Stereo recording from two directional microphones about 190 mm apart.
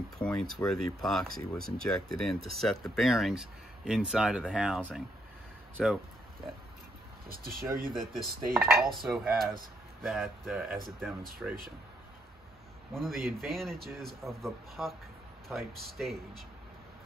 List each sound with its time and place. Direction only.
0.2 s speech: 5° left (ahead or behind)
7.2 s speech: 50° right (ahead or behind)
7.9 s speech: centre (ahead or behind)
12.9 s speech: centre (ahead or behind)